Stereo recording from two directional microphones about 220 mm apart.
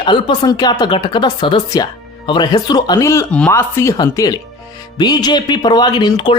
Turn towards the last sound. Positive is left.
turn(degrees=20)  # may be behind; listen again after turning